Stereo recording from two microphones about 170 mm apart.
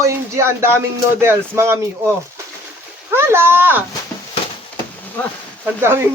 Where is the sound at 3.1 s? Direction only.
15° right (ahead or behind).